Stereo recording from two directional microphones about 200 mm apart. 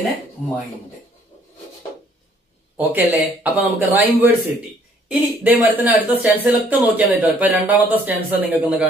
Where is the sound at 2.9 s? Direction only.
10° right (ahead or behind).